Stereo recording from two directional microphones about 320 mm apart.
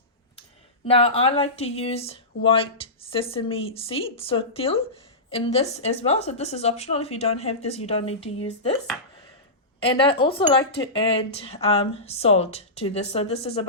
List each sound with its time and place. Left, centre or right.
0.9 s a woman's voice: centre
9.8 s a woman's voice: centre